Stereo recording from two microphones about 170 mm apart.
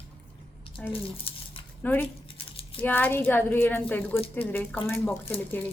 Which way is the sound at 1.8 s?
10° left (ahead or behind).